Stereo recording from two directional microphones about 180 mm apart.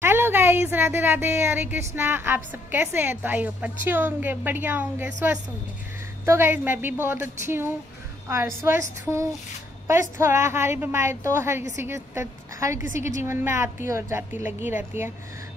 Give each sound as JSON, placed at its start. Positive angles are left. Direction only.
{"t": 0.0, "sound": "speech", "side_deg": -10}
{"t": 9.8, "sound": "speech", "side_deg": -15}